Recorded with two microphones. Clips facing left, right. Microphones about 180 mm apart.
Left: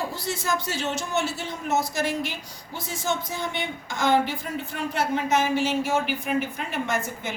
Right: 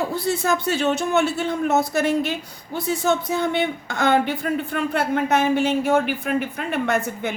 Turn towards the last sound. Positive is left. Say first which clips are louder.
# right 5 dB
turn(degrees=-60)  # may be behind; listen again after turning